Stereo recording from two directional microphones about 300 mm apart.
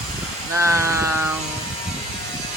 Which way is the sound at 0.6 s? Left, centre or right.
Centre.